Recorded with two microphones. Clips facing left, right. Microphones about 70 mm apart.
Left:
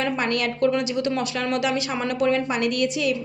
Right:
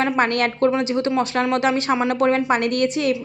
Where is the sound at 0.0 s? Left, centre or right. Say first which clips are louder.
Right 5 dB; right.